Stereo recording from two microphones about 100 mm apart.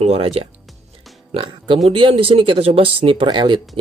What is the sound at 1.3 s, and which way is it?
Speech, 55° right (ahead or behind).